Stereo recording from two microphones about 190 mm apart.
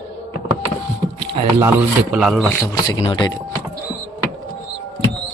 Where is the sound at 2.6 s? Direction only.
20° left (ahead or behind).